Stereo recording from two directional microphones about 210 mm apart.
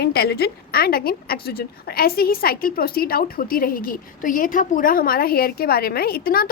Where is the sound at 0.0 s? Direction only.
50° left (ahead or behind).